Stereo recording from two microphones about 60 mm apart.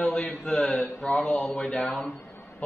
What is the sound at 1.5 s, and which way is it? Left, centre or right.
Mantra, centre.